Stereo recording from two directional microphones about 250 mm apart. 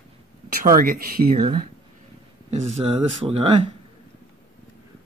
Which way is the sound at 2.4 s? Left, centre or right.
Right.